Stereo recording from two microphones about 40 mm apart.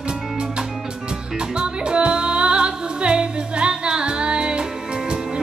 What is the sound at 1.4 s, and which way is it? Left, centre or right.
Music, right.